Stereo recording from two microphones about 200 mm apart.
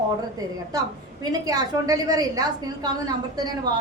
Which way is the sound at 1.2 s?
20° right (ahead or behind).